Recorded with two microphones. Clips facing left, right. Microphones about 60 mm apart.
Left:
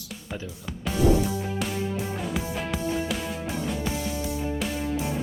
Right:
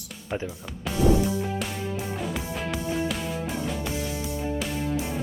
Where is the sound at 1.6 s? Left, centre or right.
Centre.